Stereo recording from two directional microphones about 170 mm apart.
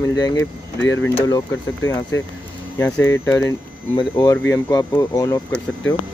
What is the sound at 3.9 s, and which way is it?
Speech, 25° left (ahead or behind).